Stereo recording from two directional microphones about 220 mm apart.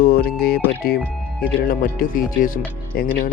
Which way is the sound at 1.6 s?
40° left (ahead or behind).